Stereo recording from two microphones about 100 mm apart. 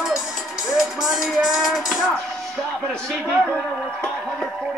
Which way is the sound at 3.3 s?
10° left (ahead or behind).